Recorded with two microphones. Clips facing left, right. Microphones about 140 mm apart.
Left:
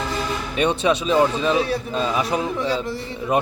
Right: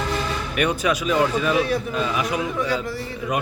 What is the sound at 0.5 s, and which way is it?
Speech, 25° left (ahead or behind).